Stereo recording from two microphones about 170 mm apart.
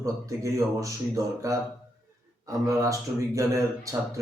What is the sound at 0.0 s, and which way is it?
Speech, 20° right (ahead or behind).